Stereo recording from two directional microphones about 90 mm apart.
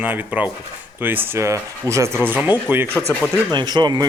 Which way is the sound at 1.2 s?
30° right (ahead or behind).